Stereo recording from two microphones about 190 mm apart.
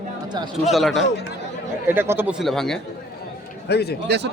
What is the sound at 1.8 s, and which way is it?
Speech, 10° right (ahead or behind).